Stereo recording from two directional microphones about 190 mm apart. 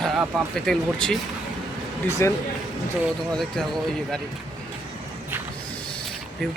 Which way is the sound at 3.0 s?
Centre (ahead or behind).